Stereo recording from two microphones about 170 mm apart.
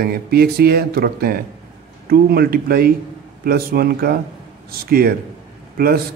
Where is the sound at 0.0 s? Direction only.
65° right (ahead or behind).